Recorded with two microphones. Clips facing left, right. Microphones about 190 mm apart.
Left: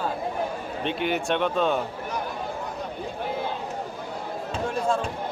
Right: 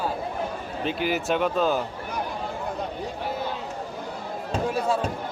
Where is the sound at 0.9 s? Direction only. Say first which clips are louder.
Right 1 dB; centre (ahead or behind).